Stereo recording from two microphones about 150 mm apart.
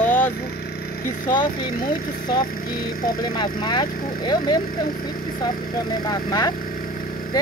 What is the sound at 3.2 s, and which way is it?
Speech, 30° left (ahead or behind).